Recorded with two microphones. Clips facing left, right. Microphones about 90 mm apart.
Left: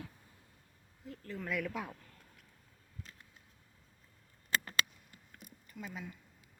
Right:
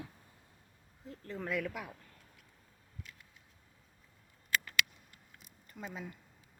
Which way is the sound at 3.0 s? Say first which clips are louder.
Right 1 dB; 35° left (ahead or behind).